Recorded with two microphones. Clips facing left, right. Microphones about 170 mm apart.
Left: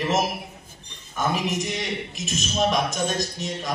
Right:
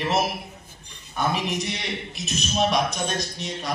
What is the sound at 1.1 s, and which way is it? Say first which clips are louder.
Speech: even; 40° left (ahead or behind).